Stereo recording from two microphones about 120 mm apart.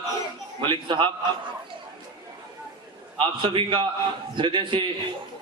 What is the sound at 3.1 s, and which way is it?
A man's voice, 45° right (ahead or behind).